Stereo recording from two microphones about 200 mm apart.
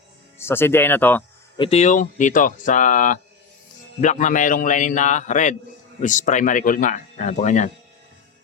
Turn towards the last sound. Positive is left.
turn(degrees=35)  # may be behind; listen again after turning